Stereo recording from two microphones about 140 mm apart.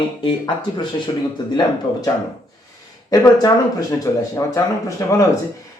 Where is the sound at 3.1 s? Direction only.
25° left (ahead or behind).